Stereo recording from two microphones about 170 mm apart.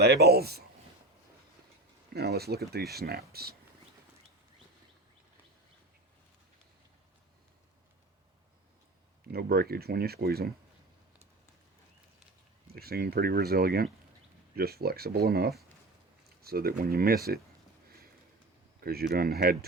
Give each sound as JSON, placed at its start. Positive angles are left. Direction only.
{"t": 0.0, "sound": "speech", "side_deg": -70}
{"t": 2.1, "sound": "speech", "side_deg": -70}
{"t": 9.3, "sound": "speech", "side_deg": -65}
{"t": 12.7, "sound": "speech", "side_deg": -65}
{"t": 18.8, "sound": "speech", "side_deg": -65}